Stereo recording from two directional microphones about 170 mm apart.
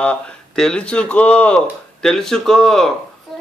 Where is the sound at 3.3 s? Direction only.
Centre (ahead or behind).